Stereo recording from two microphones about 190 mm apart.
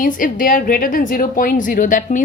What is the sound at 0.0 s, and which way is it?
A woman's voice, 45° left (ahead or behind).